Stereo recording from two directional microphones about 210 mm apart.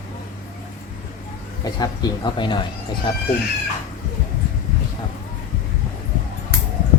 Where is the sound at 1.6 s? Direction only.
20° left (ahead or behind).